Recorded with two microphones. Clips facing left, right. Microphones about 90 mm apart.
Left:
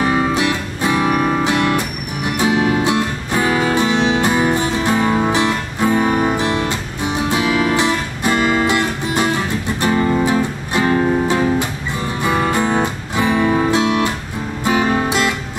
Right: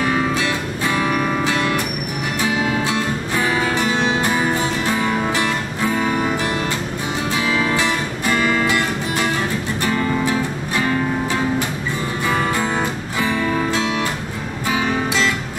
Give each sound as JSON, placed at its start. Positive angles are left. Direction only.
{"t": 0.0, "sound": "music", "side_deg": 20}
{"t": 12.3, "sound": "music", "side_deg": 20}